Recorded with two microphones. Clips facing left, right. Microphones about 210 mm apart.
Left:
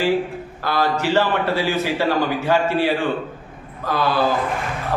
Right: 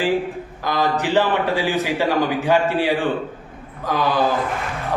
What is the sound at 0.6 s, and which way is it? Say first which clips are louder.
A man's voice: even; 15° right (ahead or behind).